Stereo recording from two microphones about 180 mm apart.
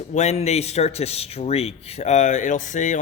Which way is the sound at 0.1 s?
40° left (ahead or behind).